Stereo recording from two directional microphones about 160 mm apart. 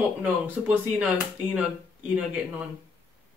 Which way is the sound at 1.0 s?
10° right (ahead or behind).